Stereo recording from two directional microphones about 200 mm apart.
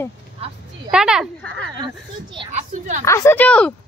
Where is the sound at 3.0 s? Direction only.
15° left (ahead or behind).